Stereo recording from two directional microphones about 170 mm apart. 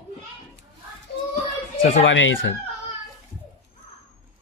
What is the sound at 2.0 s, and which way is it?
Speech, 90° left.